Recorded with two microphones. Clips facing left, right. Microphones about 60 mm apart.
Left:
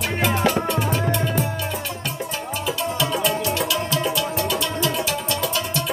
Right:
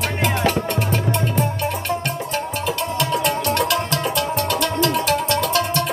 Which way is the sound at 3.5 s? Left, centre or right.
Right.